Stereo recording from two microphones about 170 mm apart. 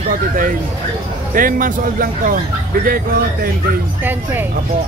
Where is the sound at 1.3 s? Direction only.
55° right (ahead or behind).